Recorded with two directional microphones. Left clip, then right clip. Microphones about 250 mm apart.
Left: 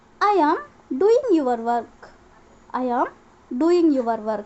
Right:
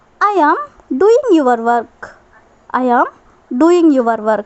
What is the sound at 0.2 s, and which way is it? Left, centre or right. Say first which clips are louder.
A woman's voice: right 7 dB; right.